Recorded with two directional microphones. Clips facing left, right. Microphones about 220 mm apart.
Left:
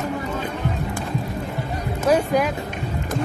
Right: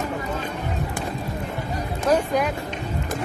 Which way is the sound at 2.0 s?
5° left (ahead or behind).